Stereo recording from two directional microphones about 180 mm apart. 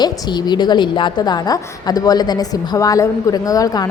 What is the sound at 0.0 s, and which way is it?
A woman's voice, 25° left (ahead or behind).